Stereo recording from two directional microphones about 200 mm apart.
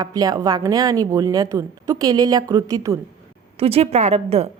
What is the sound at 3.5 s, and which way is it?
Speech, 30° right (ahead or behind).